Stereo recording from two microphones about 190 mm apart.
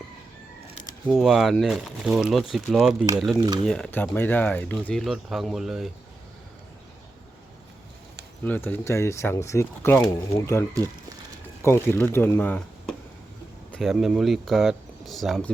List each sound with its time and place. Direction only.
1.0 s speech: 5° right (ahead or behind)
3.3 s speech: 20° right (ahead or behind)
3.7 s speech: 5° left (ahead or behind)
8.4 s speech: 10° left (ahead or behind)